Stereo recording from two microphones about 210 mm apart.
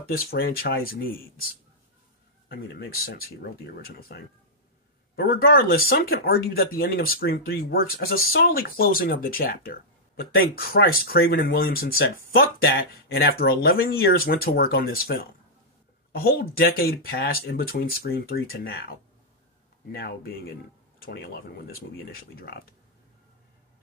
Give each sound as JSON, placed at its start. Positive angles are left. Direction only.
{"t": 0.1, "sound": "speech", "side_deg": 45}
{"t": 2.5, "sound": "speech", "side_deg": 50}